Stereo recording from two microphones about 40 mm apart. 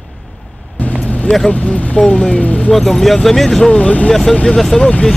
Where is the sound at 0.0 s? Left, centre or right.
Centre.